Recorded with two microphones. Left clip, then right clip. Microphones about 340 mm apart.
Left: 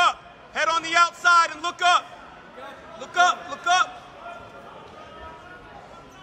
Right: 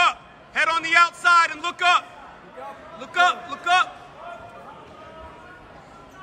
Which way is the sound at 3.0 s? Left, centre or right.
Centre.